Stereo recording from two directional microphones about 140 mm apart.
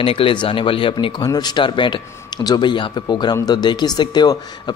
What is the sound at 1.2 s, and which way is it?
Speech, 30° left (ahead or behind).